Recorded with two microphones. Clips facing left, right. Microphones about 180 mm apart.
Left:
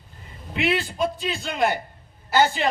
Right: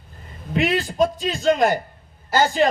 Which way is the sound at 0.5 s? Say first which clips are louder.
Right 3 dB; 40° right (ahead or behind).